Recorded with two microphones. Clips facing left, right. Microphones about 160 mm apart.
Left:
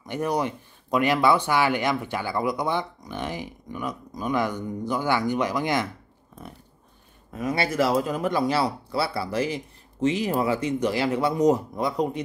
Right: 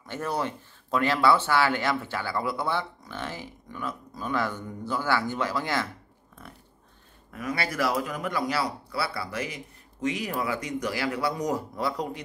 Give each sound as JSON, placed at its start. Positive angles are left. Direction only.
{"t": 0.0, "sound": "speech", "side_deg": 15}
{"t": 7.2, "sound": "speech", "side_deg": 25}